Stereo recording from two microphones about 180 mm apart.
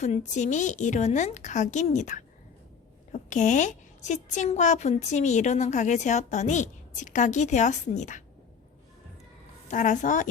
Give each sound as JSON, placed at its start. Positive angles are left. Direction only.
{"t": 0.0, "sound": "a woman's voice", "side_deg": 40}
{"t": 9.6, "sound": "a woman's voice", "side_deg": 45}